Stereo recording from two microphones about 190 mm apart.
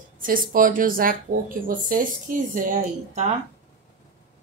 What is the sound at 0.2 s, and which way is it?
Speech, 45° right (ahead or behind).